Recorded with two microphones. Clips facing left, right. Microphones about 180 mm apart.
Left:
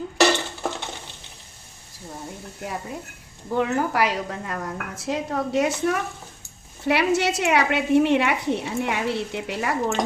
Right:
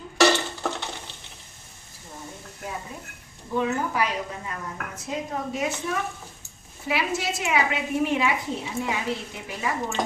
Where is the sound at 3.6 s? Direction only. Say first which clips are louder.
Left 4 dB; 75° left (ahead or behind).